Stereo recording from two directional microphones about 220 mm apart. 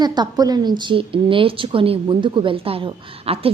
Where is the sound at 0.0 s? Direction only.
20° right (ahead or behind).